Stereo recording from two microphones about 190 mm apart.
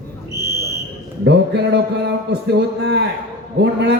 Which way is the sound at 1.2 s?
60° right (ahead or behind).